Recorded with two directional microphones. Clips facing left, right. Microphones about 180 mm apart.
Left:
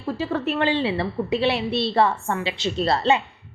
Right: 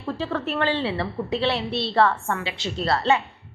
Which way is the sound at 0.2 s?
15° left (ahead or behind).